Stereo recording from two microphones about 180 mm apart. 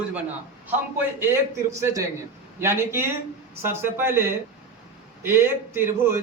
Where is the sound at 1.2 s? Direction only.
15° right (ahead or behind).